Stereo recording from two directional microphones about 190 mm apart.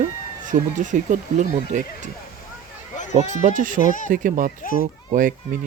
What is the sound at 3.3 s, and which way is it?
A child's voice, 40° right (ahead or behind).